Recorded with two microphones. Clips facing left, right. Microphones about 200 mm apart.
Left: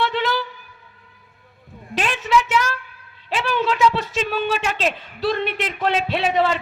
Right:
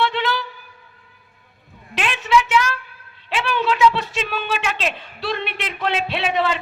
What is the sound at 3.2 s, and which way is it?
A woman's voice, 40° left (ahead or behind).